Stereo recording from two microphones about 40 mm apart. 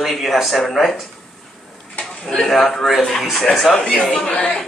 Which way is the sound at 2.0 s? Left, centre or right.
Centre.